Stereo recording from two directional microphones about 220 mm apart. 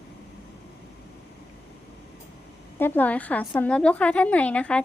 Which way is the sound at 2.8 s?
10° left (ahead or behind).